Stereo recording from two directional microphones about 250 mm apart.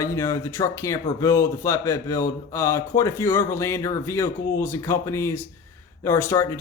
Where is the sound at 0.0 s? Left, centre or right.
Centre.